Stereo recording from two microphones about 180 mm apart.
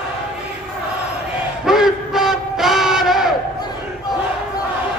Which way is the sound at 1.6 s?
Centre (ahead or behind).